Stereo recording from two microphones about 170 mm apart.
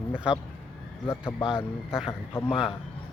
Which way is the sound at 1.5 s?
5° right (ahead or behind).